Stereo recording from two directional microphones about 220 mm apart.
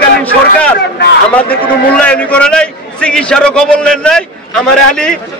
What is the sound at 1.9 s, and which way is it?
A man's voice, 5° left (ahead or behind).